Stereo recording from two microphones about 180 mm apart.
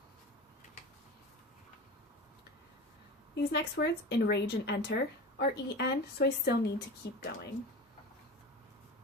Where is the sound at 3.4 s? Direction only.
65° left (ahead or behind).